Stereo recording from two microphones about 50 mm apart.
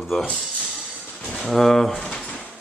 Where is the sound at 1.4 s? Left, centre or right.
Centre.